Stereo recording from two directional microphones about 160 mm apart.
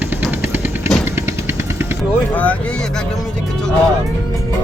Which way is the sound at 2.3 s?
10° left (ahead or behind).